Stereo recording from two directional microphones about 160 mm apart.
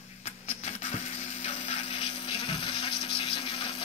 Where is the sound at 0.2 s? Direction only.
40° left (ahead or behind).